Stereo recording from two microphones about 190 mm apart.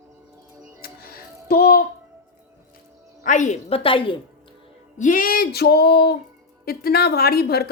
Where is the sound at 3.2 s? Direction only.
40° left (ahead or behind).